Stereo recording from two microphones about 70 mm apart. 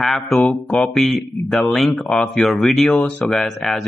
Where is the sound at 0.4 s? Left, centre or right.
Centre.